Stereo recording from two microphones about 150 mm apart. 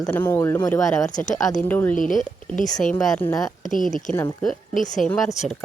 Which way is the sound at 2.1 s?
60° left (ahead or behind).